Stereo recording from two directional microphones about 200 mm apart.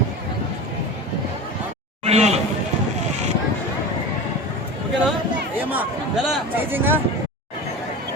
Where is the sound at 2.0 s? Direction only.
30° right (ahead or behind).